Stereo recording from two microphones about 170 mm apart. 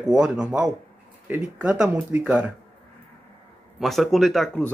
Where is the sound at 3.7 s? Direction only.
Centre (ahead or behind).